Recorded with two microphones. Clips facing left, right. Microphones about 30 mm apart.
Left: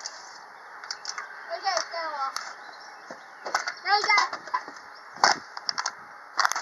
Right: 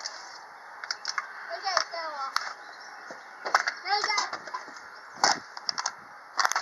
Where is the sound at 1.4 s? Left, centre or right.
Centre.